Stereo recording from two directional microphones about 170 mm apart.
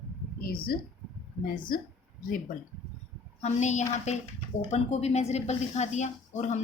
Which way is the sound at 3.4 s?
40° left (ahead or behind).